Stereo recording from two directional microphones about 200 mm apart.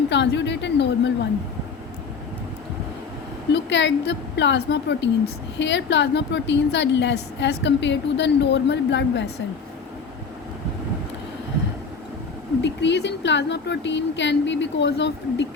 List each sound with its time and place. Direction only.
0.1 s a woman's voice: 60° left (ahead or behind)
3.5 s a woman's voice: 60° left (ahead or behind)
12.6 s a woman's voice: 60° left (ahead or behind)